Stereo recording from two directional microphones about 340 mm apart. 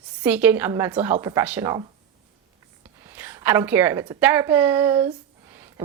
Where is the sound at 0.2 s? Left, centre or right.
Centre.